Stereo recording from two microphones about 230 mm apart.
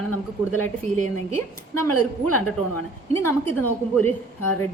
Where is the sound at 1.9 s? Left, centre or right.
Left.